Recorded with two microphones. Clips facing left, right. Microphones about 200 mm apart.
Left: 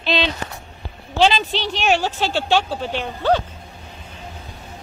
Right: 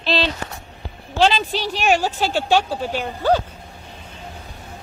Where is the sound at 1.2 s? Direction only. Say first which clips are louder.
Even; centre (ahead or behind).